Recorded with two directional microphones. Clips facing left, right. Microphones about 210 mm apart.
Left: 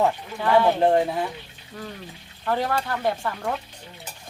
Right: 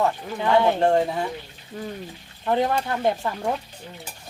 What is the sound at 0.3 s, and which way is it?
Speech, 20° right (ahead or behind).